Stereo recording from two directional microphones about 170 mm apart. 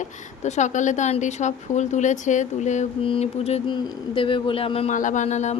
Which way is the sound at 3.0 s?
35° left (ahead or behind).